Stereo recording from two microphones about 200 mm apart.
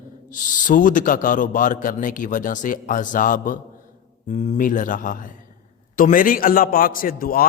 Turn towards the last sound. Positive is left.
turn(degrees=45)  # may be behind; listen again after turning